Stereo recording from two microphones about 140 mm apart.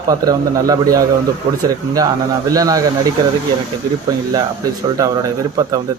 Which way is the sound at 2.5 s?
25° right (ahead or behind).